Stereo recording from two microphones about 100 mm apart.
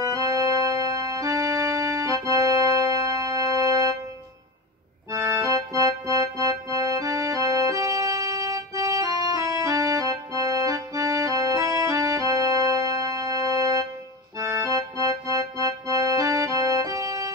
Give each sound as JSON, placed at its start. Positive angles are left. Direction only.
{"t": 0.0, "sound": "music", "side_deg": -35}
{"t": 5.1, "sound": "keyboard", "side_deg": -35}
{"t": 14.4, "sound": "organ", "side_deg": -35}